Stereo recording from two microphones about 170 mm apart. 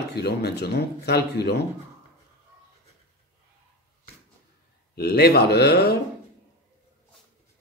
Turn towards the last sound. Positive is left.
turn(degrees=70)  # may be behind; listen again after turning